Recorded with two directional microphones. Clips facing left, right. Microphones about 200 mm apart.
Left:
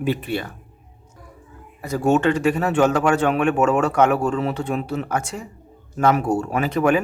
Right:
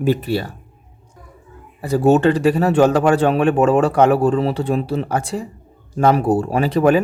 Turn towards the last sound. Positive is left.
turn(degrees=-35)  # may be behind; listen again after turning